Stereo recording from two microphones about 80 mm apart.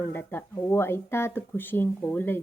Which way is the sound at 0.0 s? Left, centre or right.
Left.